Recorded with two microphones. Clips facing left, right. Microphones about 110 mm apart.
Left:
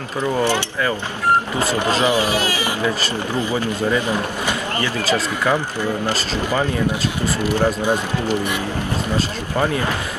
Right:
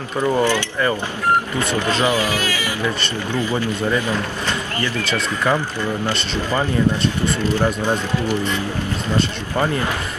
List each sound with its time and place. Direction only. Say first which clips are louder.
0.2 s speech: right 2 dB; 15° right (ahead or behind)
2.0 s speech: left 1 dB; 20° left (ahead or behind)
7.4 s speech: left 2 dB; 15° left (ahead or behind)